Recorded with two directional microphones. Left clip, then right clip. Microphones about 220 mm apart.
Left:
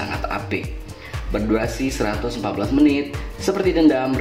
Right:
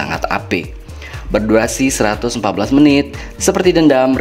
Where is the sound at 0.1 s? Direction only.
45° right (ahead or behind).